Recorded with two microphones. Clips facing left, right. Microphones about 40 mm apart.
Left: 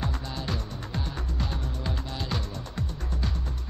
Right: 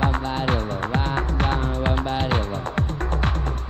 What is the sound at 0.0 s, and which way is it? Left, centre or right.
Music, right.